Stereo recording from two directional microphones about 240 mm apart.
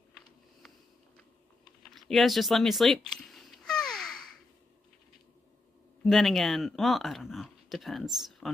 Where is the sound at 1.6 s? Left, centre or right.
Centre.